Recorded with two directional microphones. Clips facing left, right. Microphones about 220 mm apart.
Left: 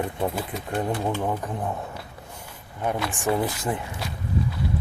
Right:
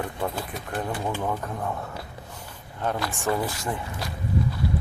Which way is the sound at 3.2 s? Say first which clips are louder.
Left 3 dB; 15° left (ahead or behind).